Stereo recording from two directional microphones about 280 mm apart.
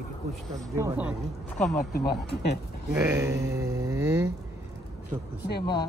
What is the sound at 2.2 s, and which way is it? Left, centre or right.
Speech, left.